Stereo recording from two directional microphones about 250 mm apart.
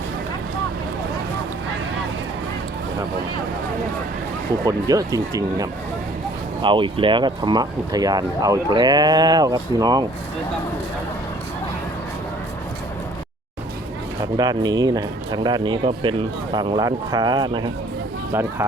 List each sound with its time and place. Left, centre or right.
4.6 s speech: centre
14.3 s speech: centre